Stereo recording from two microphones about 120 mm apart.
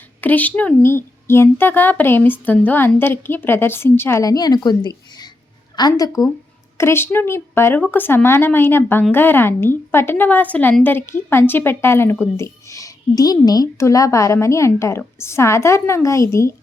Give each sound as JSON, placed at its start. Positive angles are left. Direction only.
{"t": 0.2, "sound": "a woman's voice", "side_deg": 15}
{"t": 6.7, "sound": "a woman's voice", "side_deg": 20}